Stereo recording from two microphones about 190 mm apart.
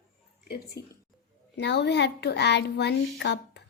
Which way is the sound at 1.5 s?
65° left (ahead or behind).